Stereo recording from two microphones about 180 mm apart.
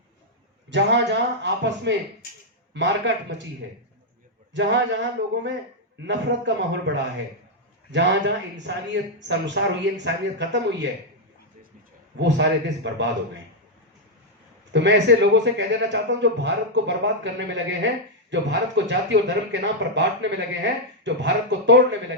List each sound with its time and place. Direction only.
0.7 s a man's voice: 80° right
4.5 s a man's voice: 80° right
12.2 s speech: 75° right (ahead or behind)
14.7 s a man's voice: 75° right (ahead or behind)